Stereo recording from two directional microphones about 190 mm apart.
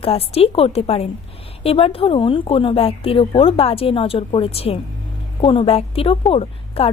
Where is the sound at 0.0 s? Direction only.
30° left (ahead or behind).